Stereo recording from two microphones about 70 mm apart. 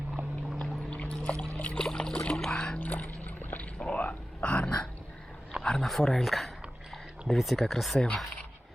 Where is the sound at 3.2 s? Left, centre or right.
Left.